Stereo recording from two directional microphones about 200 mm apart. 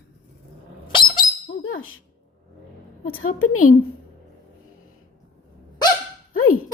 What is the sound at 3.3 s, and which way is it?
Speech, 90° left.